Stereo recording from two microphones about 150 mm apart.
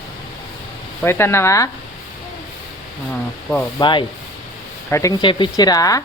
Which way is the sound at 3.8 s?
30° left (ahead or behind).